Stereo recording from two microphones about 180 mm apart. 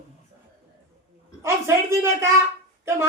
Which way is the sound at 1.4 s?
15° right (ahead or behind).